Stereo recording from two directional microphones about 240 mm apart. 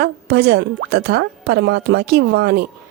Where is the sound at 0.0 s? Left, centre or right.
Right.